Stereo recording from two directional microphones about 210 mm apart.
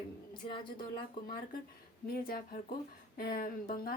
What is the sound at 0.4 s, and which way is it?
Speech, 20° left (ahead or behind).